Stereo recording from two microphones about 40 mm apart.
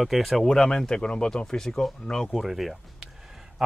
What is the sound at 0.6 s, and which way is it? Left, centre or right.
Speech, centre.